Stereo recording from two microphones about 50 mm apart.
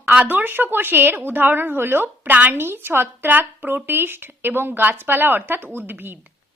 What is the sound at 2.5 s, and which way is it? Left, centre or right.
Speech, right.